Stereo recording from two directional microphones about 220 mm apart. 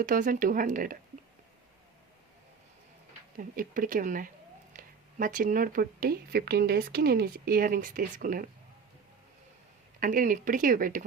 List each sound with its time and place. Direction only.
0.0 s speech: 35° right (ahead or behind)
3.3 s speech: 40° right (ahead or behind)
10.0 s speech: 40° right (ahead or behind)